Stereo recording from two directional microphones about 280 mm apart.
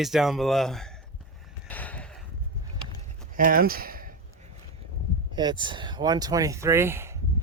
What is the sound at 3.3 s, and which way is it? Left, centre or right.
Speech, right.